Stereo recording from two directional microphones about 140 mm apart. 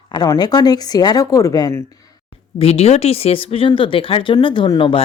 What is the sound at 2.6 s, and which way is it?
Speech, 45° left (ahead or behind).